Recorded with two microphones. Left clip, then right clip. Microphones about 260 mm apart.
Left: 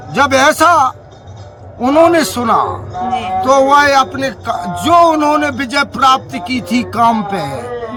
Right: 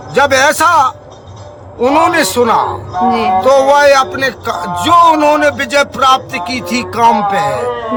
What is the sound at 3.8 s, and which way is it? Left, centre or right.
A man's voice, centre.